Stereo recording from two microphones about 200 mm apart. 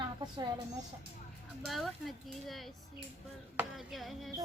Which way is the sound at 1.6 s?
Centre (ahead or behind).